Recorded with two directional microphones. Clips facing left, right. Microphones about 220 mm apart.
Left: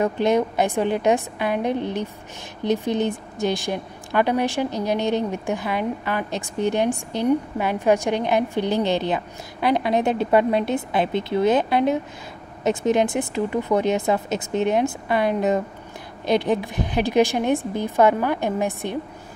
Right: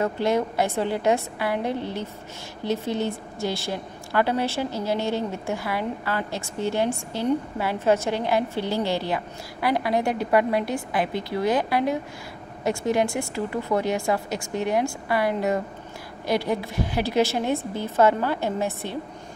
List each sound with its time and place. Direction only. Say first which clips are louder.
0.0 s a woman's voice: left 3 dB; 20° left (ahead or behind)